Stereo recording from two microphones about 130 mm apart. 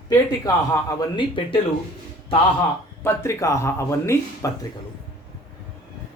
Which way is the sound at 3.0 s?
20° left (ahead or behind).